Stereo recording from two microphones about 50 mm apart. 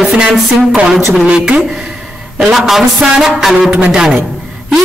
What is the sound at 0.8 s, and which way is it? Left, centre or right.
Speech, centre.